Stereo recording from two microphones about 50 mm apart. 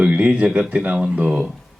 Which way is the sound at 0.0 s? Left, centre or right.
Right.